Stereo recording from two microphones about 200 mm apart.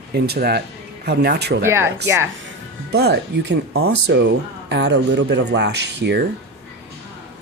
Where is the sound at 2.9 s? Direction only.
55° right (ahead or behind); by 3.9 s 75° right (ahead or behind).